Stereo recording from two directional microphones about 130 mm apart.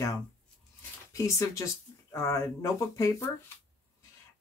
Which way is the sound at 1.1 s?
25° left (ahead or behind).